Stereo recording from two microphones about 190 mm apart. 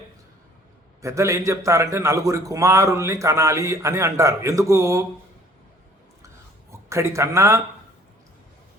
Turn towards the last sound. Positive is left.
turn(degrees=-15)  # may be behind; listen again after turning